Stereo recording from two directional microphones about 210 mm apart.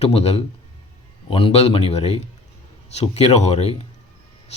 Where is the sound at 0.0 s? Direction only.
30° left (ahead or behind).